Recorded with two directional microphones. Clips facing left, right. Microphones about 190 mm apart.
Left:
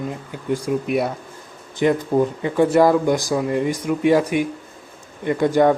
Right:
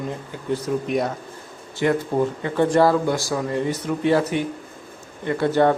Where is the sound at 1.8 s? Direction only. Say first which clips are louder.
Left 2 dB; 20° left (ahead or behind).